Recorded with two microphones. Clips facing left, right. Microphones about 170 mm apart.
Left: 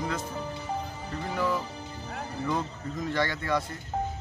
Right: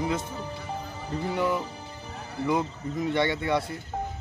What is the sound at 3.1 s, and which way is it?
Speech, 25° right (ahead or behind).